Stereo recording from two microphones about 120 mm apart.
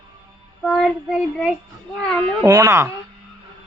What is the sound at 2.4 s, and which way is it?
Speech, 30° right (ahead or behind).